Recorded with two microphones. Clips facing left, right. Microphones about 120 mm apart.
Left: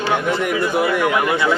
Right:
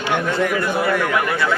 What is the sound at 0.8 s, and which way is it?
Speech, 15° left (ahead or behind).